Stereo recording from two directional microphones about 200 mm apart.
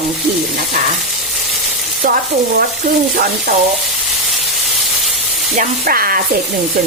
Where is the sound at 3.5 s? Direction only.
50° right (ahead or behind).